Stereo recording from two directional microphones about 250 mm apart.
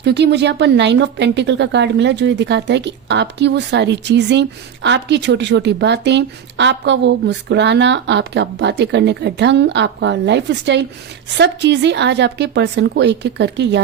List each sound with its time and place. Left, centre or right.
0.0 s speech: right